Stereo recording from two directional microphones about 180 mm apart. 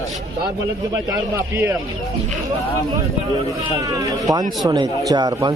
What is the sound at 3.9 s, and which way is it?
Speech, 20° right (ahead or behind).